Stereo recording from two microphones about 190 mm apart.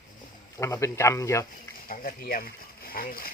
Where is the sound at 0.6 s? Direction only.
15° left (ahead or behind).